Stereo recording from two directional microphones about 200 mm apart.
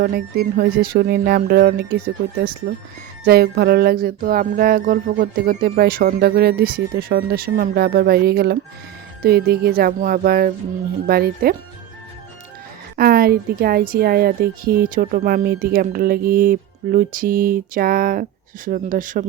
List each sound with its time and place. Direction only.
0.0 s a woman's voice: 50° right (ahead or behind)
3.2 s a woman's voice: 50° right (ahead or behind)
13.0 s a woman's voice: 50° right (ahead or behind)